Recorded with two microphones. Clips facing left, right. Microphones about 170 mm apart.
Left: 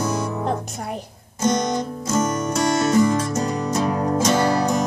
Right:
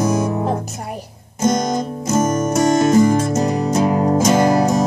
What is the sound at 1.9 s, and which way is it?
Music, 25° right (ahead or behind).